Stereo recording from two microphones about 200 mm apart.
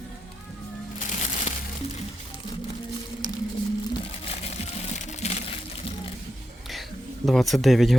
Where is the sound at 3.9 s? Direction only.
30° left (ahead or behind).